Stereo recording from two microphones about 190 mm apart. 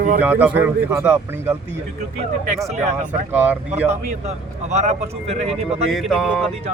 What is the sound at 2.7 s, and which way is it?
Speech, 35° right (ahead or behind).